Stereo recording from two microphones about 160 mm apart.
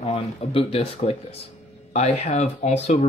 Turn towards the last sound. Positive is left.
turn(degrees=45)  # may be behind; listen again after turning